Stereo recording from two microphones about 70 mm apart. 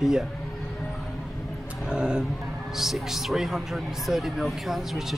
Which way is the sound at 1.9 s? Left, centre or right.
Centre.